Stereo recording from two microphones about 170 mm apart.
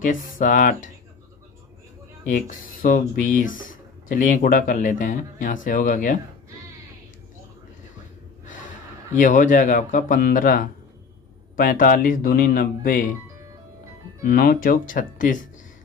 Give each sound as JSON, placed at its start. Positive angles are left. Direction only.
{"t": 0.0, "sound": "speech", "side_deg": 50}
{"t": 2.2, "sound": "speech", "side_deg": 50}
{"t": 8.5, "sound": "a man's voice", "side_deg": 50}
{"t": 14.2, "sound": "speech", "side_deg": 60}